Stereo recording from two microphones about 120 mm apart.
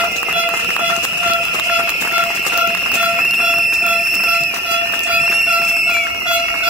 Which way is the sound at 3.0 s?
10° right (ahead or behind).